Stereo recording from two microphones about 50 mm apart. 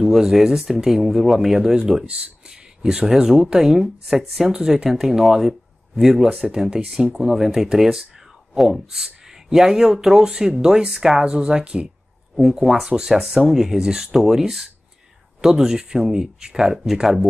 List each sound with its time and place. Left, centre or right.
0.0 s speech: centre
2.0 s speech: centre
12.4 s speech: centre